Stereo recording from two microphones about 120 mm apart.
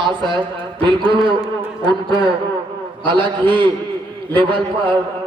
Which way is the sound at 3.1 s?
40° right (ahead or behind).